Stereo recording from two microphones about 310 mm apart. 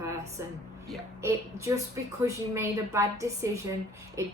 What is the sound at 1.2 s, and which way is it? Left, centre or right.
A woman's voice, centre.